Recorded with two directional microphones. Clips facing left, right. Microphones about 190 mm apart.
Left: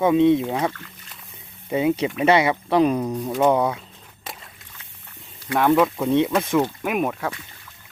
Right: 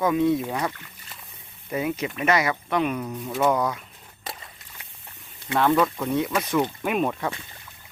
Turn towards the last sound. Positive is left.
turn(degrees=5)  # may be behind; listen again after turning